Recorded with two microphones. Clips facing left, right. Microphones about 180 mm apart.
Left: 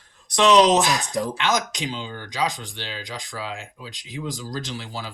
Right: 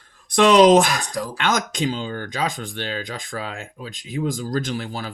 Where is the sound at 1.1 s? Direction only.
25° left (ahead or behind).